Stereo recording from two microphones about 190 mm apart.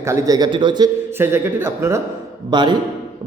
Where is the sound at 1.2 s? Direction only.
10° right (ahead or behind).